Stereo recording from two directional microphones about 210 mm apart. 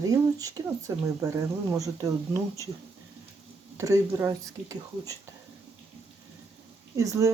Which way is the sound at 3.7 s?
15° right (ahead or behind).